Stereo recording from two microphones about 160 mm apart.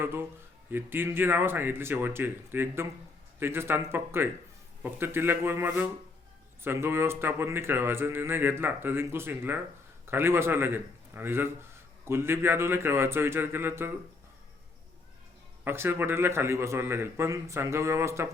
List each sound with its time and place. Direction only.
0.0 s speech: 15° right (ahead or behind)
15.6 s speech: 15° right (ahead or behind)